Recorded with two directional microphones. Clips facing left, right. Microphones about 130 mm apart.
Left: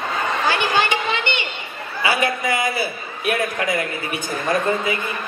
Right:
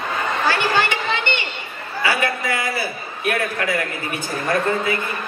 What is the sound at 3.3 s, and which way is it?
Speech, 20° left (ahead or behind).